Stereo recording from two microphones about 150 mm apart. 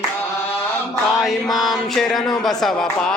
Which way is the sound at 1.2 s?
Centre (ahead or behind).